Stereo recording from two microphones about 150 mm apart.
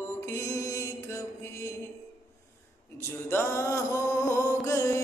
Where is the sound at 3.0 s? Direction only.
15° left (ahead or behind).